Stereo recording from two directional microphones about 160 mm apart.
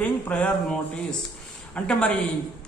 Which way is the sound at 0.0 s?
10° left (ahead or behind).